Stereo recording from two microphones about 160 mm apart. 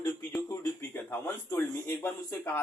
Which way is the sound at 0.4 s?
15° left (ahead or behind).